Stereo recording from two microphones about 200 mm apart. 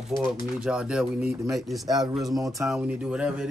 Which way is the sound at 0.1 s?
20° left (ahead or behind).